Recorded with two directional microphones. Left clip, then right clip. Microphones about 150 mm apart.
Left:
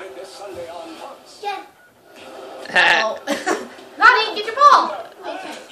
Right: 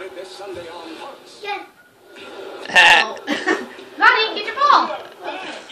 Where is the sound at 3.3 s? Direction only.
40° left (ahead or behind).